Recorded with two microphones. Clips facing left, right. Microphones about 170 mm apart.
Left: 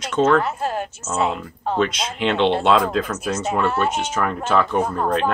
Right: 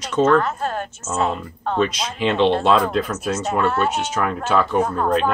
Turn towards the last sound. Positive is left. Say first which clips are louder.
# right 1 dB
turn(degrees=5)  # may be behind; listen again after turning